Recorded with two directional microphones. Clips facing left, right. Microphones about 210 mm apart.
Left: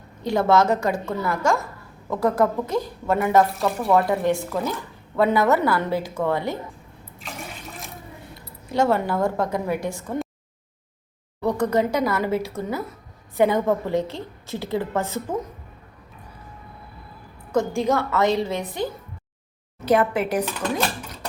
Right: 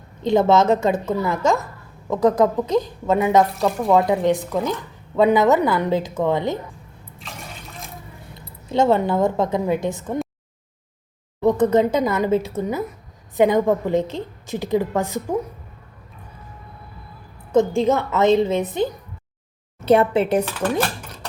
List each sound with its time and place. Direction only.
0.3 s a woman's voice: 20° right (ahead or behind)
8.7 s a woman's voice: 25° right (ahead or behind)
11.3 s a woman's voice: 20° right (ahead or behind)
17.5 s a woman's voice: 20° right (ahead or behind)